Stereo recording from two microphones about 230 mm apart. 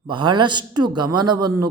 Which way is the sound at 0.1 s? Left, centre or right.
Centre.